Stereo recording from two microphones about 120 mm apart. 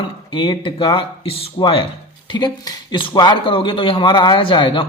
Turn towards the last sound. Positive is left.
turn(degrees=45)  # may be behind; listen again after turning